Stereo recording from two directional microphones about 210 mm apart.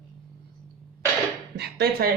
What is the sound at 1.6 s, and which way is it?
Dishes, 50° right (ahead or behind).